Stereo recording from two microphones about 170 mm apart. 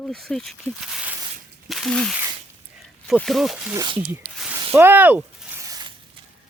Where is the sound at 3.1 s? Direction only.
Centre (ahead or behind).